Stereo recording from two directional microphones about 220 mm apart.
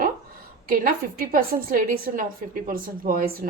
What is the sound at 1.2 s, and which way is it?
A woman's voice, 40° right (ahead or behind).